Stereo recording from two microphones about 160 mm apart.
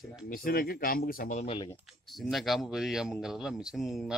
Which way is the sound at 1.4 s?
30° left (ahead or behind).